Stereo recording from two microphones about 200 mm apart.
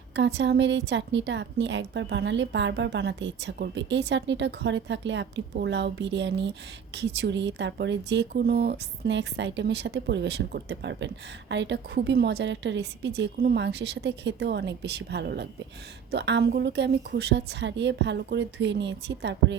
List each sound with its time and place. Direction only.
0.2 s speech: 60° right (ahead or behind)